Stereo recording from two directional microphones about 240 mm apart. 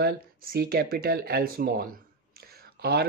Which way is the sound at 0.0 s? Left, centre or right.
Right.